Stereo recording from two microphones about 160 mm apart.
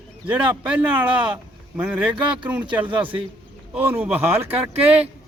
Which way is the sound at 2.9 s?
30° right (ahead or behind).